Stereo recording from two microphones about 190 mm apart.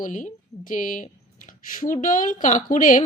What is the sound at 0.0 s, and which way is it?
Speech, 45° left (ahead or behind).